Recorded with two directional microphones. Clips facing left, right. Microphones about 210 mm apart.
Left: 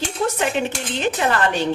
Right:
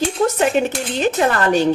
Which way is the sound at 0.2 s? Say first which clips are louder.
Right 4 dB; 45° right (ahead or behind).